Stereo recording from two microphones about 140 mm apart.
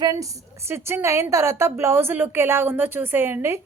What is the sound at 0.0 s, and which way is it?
A woman's voice, 25° right (ahead or behind).